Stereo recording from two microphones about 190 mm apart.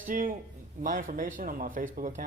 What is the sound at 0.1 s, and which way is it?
Speech, 45° right (ahead or behind).